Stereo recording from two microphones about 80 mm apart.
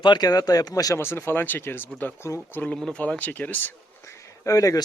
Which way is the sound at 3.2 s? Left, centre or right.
Left.